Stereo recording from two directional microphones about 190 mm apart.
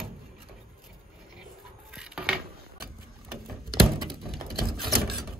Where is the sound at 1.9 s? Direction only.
5° right (ahead or behind).